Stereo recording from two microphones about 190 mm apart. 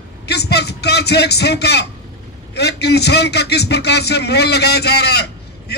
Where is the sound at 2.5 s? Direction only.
60° left (ahead or behind).